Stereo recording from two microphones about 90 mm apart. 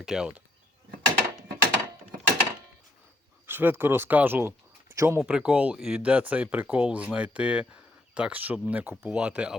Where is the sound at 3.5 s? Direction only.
25° right (ahead or behind).